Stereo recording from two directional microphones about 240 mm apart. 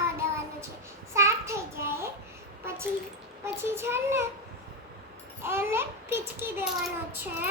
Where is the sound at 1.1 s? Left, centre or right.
Centre.